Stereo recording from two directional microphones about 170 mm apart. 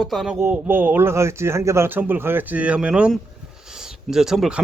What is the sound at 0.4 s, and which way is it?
Speech, 10° right (ahead or behind).